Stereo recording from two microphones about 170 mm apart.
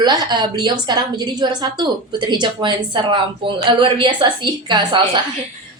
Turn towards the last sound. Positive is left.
turn(degrees=-25)  # may be behind; listen again after turning